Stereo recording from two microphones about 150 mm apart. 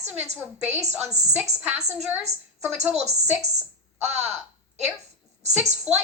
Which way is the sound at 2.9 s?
45° right (ahead or behind).